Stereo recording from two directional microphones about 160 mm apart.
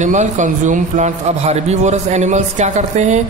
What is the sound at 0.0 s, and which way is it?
A man's voice, 50° right (ahead or behind).